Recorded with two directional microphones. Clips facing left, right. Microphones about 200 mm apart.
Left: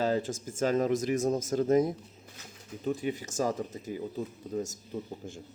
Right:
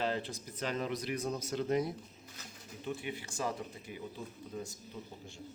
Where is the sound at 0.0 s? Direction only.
45° left (ahead or behind).